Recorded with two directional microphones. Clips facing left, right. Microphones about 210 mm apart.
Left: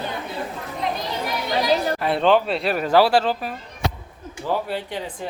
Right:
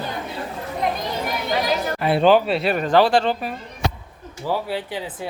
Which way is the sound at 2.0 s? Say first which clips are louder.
Right 6 dB; 5° right (ahead or behind).